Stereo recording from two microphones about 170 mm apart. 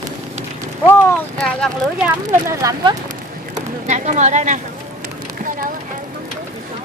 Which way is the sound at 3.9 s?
45° right (ahead or behind).